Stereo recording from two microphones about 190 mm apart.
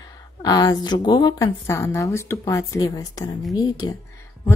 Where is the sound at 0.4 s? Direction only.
20° left (ahead or behind).